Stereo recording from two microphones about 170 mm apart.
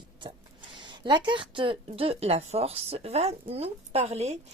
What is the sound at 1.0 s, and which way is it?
A woman's voice, 25° right (ahead or behind).